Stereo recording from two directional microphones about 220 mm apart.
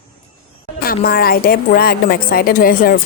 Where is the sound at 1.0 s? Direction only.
45° left (ahead or behind).